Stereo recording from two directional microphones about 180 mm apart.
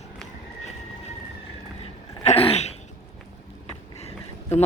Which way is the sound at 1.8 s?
35° left (ahead or behind).